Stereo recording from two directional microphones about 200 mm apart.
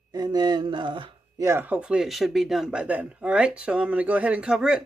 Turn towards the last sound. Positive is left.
turn(degrees=-5)  # may be behind; listen again after turning